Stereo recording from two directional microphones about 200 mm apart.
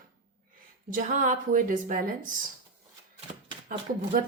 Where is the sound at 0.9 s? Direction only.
40° right (ahead or behind).